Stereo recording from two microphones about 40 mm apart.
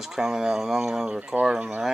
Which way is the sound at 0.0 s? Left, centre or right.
Centre.